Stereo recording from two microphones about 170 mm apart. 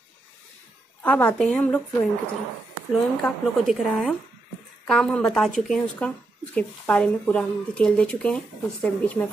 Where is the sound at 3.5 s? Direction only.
Centre (ahead or behind).